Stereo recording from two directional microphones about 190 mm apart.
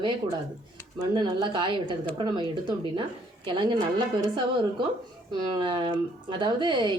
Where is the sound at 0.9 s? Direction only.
25° right (ahead or behind).